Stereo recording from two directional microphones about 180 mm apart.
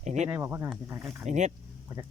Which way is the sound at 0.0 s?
40° right (ahead or behind).